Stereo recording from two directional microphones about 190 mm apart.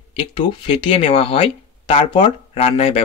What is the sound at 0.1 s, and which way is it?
Speech, 25° left (ahead or behind).